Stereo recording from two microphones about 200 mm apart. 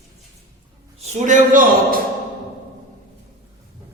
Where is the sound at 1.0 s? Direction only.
35° right (ahead or behind).